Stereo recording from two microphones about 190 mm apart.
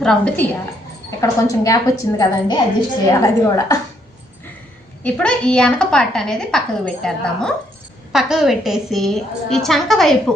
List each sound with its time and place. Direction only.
0.0 s a woman's voice: 5° left (ahead or behind)
1.2 s a woman's voice: 15° left (ahead or behind)
5.0 s a woman's voice: 5° left (ahead or behind)